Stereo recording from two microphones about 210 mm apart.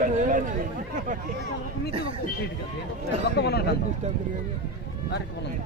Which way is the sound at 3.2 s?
50° left (ahead or behind).